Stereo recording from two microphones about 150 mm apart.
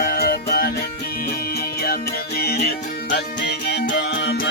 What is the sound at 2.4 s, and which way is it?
Music, 90° left.